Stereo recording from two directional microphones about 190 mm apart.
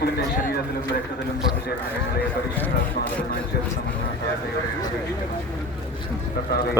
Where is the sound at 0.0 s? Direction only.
55° left (ahead or behind).